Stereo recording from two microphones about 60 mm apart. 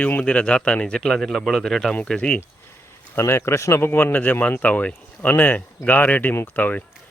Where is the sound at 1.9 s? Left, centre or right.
Centre.